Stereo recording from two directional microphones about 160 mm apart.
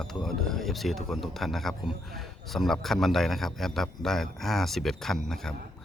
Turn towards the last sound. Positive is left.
turn(degrees=5)  # may be behind; listen again after turning